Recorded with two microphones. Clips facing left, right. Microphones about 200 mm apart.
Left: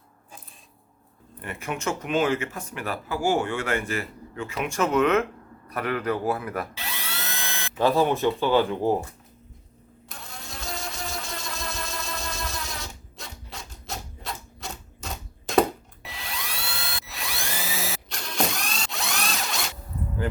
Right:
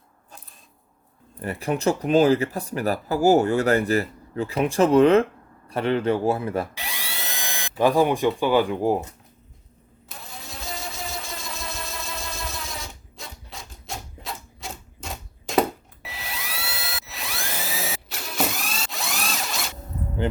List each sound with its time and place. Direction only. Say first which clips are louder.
1.4 s a man's voice: right 6 dB; 35° right (ahead or behind)
6.7 s drill: right 1 dB; 15° right (ahead or behind)
10.1 s vehicle: right 1 dB; centre (ahead or behind)
16.0 s dental drill: right 1 dB; 5° right (ahead or behind)